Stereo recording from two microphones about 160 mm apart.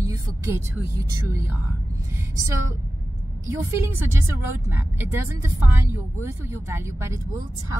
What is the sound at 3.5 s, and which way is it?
A woman's voice, 15° right (ahead or behind).